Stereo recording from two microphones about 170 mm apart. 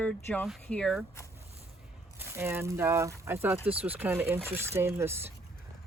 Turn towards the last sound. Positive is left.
turn(degrees=-15)  # may be behind; listen again after turning